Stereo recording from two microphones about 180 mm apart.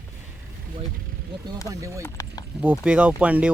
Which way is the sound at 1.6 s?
15° right (ahead or behind).